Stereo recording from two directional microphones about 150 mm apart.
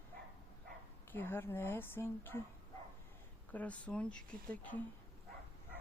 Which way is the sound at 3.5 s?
10° left (ahead or behind).